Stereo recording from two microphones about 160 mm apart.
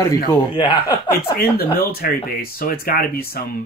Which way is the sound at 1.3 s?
75° left (ahead or behind).